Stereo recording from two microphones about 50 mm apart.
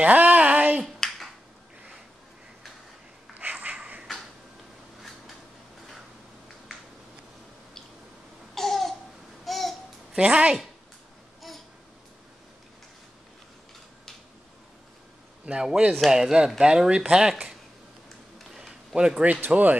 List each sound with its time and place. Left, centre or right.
0.0 s a sound: right
1.0 s finger snapping: centre
3.3 s a sound: right
8.5 s babbling: centre
10.1 s a woman's voice: right
11.4 s babbling: centre
15.4 s speech: centre
18.5 s a sound: centre
18.9 s a woman's voice: centre
19.4 s speech: right